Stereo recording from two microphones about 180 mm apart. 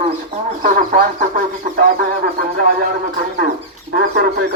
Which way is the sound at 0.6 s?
50° right (ahead or behind).